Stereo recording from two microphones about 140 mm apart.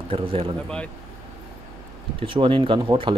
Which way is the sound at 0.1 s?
40° right (ahead or behind).